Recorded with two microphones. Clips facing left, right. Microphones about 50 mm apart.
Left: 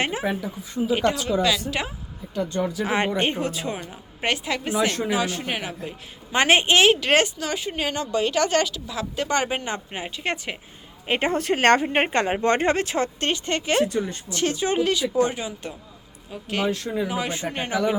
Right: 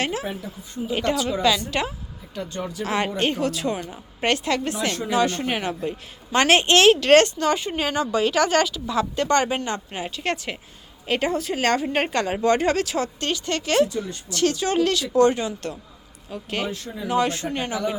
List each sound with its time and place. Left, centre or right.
0.0 s speech: left
0.9 s a woman's voice: centre
2.8 s speech: centre
3.8 s a woman's voice: centre
6.3 s a woman's voice: centre
11.3 s speech: left
11.8 s a woman's voice: left; by 16.7 s centre
16.7 s speech: left
17.1 s a woman's voice: centre
17.3 s speech: centre